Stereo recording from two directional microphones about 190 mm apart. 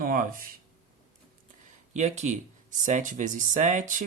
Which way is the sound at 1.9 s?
35° right (ahead or behind).